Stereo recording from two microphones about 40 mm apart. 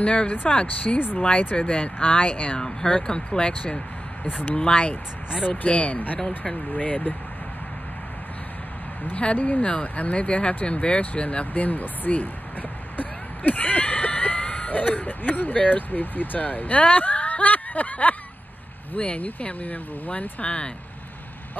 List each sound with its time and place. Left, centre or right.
0.0 s speech: left
0.3 s speech: left
1.6 s speech: left
4.3 s speech: left
4.6 s speech: left
6.1 s speech: centre
6.7 s speech: left
9.1 s speech: left